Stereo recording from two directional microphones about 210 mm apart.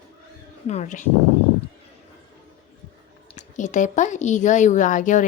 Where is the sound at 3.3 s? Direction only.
35° left (ahead or behind).